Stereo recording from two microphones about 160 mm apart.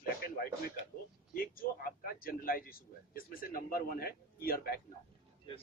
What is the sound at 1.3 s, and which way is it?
Speech, 65° left (ahead or behind).